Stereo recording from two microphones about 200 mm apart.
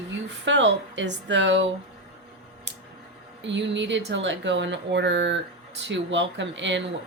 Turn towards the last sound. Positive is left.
turn(degrees=-65)  # may be behind; listen again after turning